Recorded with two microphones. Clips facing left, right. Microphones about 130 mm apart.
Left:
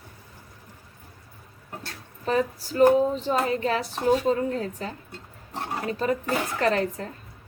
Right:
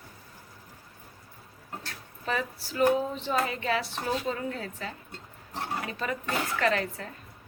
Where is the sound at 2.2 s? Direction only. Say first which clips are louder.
Left 7 dB; 35° left (ahead or behind).